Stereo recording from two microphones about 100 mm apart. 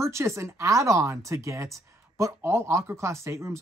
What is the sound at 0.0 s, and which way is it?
Speech, 30° right (ahead or behind).